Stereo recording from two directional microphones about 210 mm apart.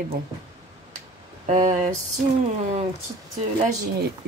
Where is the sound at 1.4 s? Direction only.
35° right (ahead or behind).